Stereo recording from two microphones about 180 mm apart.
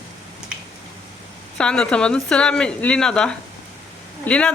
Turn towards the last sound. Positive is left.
turn(degrees=5)  # may be behind; listen again after turning